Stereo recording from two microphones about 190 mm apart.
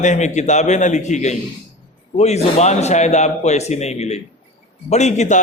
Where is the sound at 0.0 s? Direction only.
40° left (ahead or behind).